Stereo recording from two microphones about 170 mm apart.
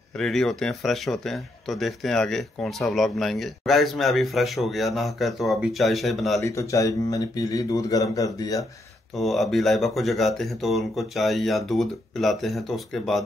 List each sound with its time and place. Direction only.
0.1 s speech: centre (ahead or behind)
6.4 s speech: 15° left (ahead or behind)
9.1 s speech: centre (ahead or behind)